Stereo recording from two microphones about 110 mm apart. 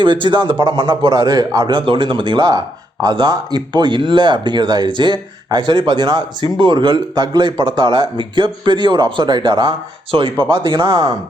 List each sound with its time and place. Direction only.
0.0 s a man's voice: 45° right (ahead or behind)